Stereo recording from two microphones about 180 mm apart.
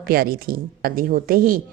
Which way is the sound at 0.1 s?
55° right (ahead or behind).